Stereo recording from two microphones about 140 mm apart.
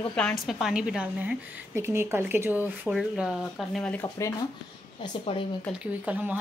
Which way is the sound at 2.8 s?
5° right (ahead or behind).